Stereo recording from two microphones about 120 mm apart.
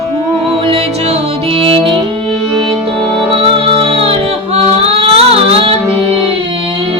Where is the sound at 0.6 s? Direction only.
55° right (ahead or behind).